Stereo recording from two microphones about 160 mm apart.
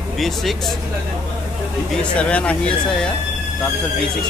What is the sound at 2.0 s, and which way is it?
Speech, 5° left (ahead or behind).